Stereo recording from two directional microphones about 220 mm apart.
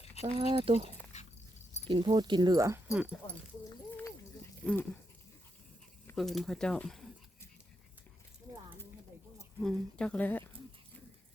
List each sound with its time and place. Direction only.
0.2 s speech: 25° right (ahead or behind)
1.1 s dog: 30° left (ahead or behind)
1.9 s speech: 20° right (ahead or behind)
4.6 s speech: 5° left (ahead or behind)
6.1 s speech: centre (ahead or behind)
9.6 s speech: 5° left (ahead or behind)